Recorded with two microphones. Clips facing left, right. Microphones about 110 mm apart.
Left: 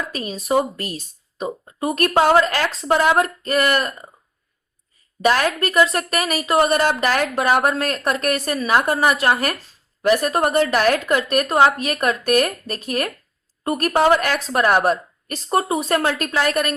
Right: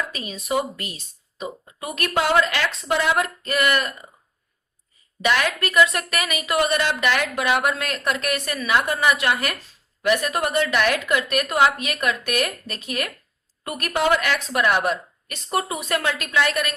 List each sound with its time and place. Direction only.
0.1 s speech: 40° left (ahead or behind)
5.2 s speech: 40° left (ahead or behind)